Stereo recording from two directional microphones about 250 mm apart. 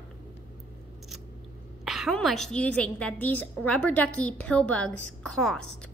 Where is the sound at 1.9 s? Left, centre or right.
Centre.